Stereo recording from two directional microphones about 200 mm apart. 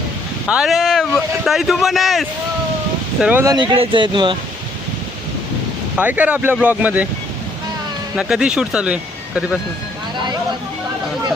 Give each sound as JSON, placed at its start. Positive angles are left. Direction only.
{"t": 0.4, "sound": "speech", "side_deg": 0}
{"t": 3.4, "sound": "speech", "side_deg": -20}
{"t": 6.0, "sound": "speech", "side_deg": -10}
{"t": 8.1, "sound": "speech", "side_deg": -5}